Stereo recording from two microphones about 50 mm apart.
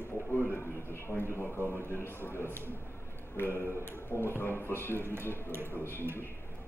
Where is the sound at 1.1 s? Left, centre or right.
Left.